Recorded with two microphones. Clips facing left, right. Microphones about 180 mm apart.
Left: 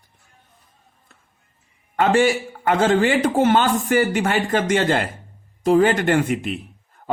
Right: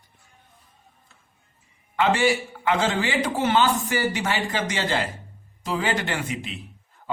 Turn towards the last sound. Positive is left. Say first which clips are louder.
# left 3 dB
turn(degrees=50)  # may be behind; listen again after turning